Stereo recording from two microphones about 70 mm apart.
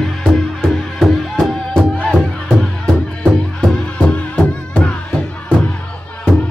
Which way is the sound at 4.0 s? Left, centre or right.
Centre.